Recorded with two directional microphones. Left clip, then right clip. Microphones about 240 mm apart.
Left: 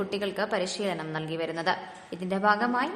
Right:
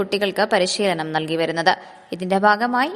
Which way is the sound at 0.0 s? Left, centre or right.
Right.